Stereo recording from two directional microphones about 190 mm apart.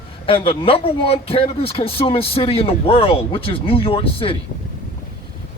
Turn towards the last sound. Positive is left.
turn(degrees=30)  # may be behind; listen again after turning